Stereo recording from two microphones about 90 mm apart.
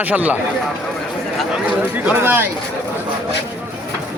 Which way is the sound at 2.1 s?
25° right (ahead or behind).